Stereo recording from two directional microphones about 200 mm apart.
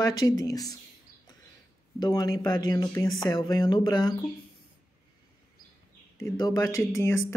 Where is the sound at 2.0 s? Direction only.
20° left (ahead or behind).